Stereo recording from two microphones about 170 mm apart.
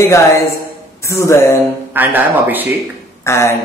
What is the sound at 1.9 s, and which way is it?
Speech, 10° right (ahead or behind).